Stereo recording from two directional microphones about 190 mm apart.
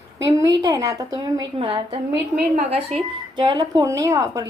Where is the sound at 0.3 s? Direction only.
15° right (ahead or behind).